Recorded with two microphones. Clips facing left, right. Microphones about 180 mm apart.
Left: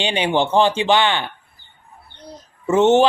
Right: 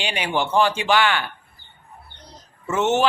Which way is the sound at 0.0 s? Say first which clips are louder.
Left 5 dB; 25° left (ahead or behind).